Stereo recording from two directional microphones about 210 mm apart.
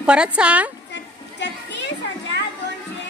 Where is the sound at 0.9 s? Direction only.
55° left (ahead or behind).